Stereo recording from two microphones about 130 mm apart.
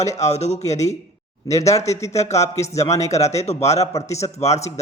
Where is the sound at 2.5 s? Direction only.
55° left (ahead or behind).